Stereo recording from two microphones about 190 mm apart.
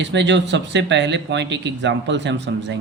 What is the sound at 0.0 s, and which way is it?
Speech, 70° right (ahead or behind).